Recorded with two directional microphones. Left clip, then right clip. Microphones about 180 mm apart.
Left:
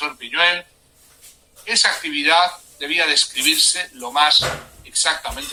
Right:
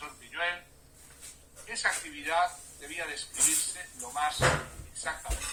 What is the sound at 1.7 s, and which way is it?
A man's voice, 50° left (ahead or behind).